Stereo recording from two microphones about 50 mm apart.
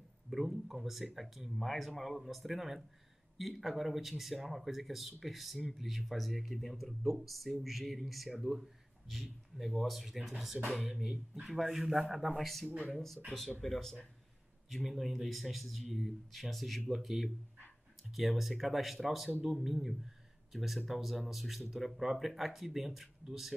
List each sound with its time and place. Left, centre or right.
0.3 s speech: centre